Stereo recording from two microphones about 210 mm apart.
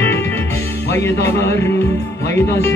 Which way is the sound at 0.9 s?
10° left (ahead or behind).